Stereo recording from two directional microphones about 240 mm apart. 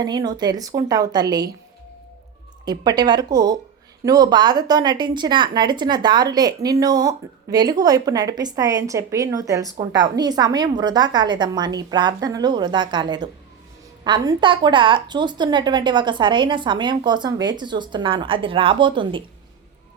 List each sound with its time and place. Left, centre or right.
0.0 s a woman's voice: centre
2.6 s a woman's voice: centre